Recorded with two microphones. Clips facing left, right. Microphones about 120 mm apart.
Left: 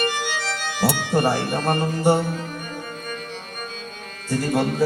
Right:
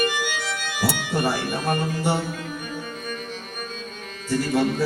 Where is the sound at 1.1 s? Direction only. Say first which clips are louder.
Left 4 dB; 45° left (ahead or behind).